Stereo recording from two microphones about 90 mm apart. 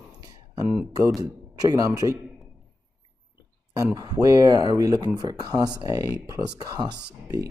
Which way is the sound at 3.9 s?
40° right (ahead or behind).